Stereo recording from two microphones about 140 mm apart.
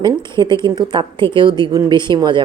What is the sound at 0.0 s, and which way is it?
Speech, 35° right (ahead or behind).